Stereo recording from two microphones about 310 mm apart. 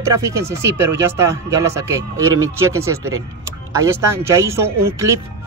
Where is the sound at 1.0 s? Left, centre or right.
Centre.